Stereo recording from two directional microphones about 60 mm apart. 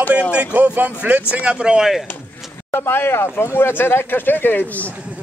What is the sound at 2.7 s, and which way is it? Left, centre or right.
Speech, left.